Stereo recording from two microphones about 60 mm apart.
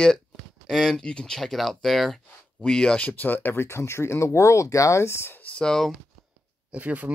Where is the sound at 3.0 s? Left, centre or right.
Left.